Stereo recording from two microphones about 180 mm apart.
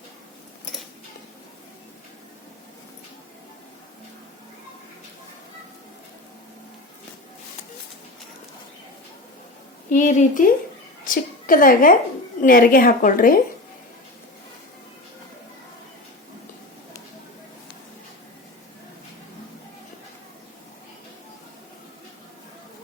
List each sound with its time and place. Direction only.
9.9 s a woman's voice: 45° left (ahead or behind)